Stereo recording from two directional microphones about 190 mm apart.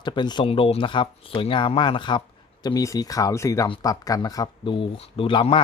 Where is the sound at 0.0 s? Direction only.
25° left (ahead or behind).